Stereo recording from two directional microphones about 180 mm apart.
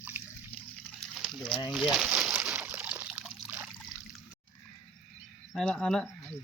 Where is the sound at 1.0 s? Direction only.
Centre (ahead or behind).